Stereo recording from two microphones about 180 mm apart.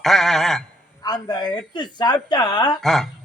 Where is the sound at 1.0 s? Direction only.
25° left (ahead or behind).